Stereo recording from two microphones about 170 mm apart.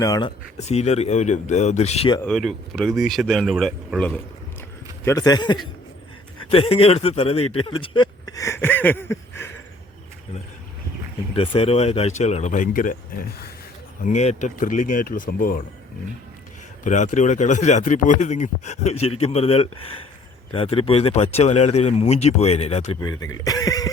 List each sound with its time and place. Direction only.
0.0 s speech: 25° left (ahead or behind)
0.5 s speech: 40° left (ahead or behind)
2.2 s speech: 5° left (ahead or behind)
5.0 s speech: 20° left (ahead or behind)
11.3 s speech: 35° left (ahead or behind); by 13.5 s 55° left (ahead or behind)
14.0 s speech: 45° left (ahead or behind)
16.8 s speech: 45° left (ahead or behind)
23.0 s speech: 20° left (ahead or behind)